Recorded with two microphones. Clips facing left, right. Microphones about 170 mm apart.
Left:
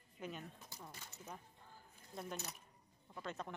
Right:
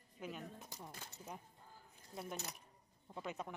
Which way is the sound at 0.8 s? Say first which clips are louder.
Even; 15° right (ahead or behind).